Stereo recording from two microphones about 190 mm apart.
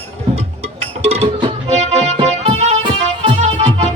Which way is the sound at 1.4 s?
35° right (ahead or behind).